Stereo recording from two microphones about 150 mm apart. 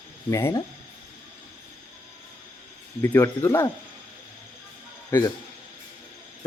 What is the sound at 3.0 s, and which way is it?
Speech, 15° left (ahead or behind).